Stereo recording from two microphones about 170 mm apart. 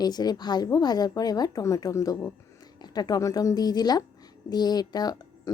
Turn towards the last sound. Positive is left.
turn(degrees=25)  # may be behind; listen again after turning